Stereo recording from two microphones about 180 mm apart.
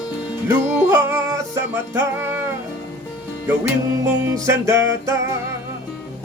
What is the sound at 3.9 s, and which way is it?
Music, 15° right (ahead or behind).